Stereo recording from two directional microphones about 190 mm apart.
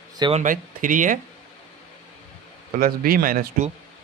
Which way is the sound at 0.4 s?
45° right (ahead or behind).